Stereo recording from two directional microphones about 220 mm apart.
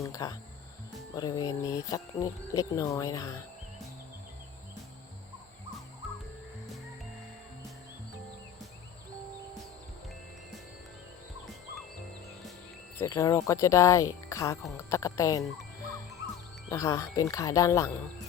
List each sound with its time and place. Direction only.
0.0 s speech: 15° left (ahead or behind)
13.0 s speech: 15° left (ahead or behind)
16.6 s speech: 15° left (ahead or behind)